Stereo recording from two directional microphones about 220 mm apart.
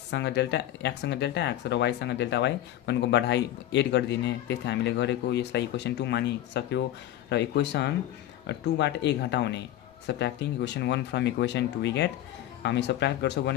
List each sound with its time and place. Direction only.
0.1 s speech: 50° left (ahead or behind)